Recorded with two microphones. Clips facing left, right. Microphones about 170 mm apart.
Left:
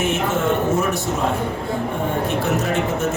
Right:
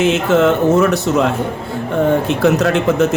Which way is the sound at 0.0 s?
90° right.